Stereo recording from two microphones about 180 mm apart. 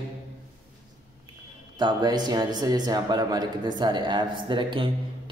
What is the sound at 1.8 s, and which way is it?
A man's voice, 25° right (ahead or behind).